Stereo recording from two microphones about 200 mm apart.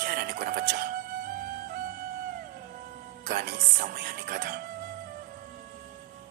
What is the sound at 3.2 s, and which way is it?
Speech, 45° right (ahead or behind).